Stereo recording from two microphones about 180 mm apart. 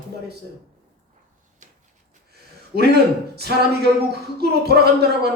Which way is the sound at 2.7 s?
65° right (ahead or behind).